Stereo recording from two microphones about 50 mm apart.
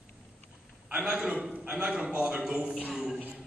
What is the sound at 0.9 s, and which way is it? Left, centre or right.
A man's voice, right.